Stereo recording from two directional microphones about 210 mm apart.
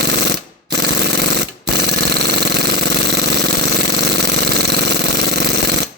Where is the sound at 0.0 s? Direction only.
55° right (ahead or behind).